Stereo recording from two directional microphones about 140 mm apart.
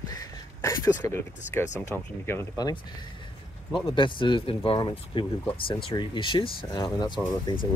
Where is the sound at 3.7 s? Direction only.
35° left (ahead or behind).